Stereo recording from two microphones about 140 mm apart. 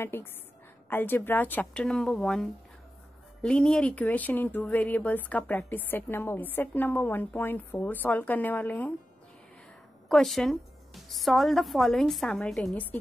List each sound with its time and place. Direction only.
0.0 s speech: 15° left (ahead or behind)
10.0 s a woman's voice: centre (ahead or behind)